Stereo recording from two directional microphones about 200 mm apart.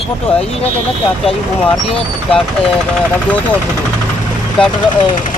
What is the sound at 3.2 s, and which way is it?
Speech, 5° left (ahead or behind).